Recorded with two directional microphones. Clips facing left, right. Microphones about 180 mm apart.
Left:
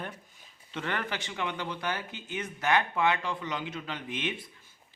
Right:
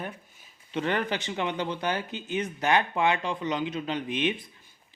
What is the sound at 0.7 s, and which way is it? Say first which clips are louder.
Speech: right 6 dB; 20° right (ahead or behind).